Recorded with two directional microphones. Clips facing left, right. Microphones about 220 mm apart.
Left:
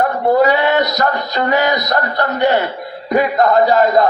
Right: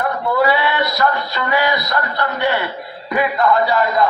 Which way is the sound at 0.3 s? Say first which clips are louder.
Left 5 dB; 45° left (ahead or behind).